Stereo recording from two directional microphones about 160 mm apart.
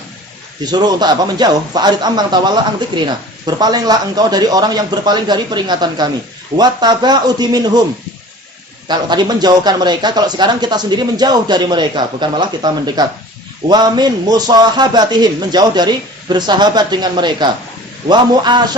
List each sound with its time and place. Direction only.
0.6 s speech: 25° right (ahead or behind)
8.9 s speech: 25° right (ahead or behind)